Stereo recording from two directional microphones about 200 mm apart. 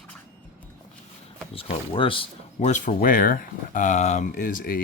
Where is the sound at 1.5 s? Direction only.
25° left (ahead or behind).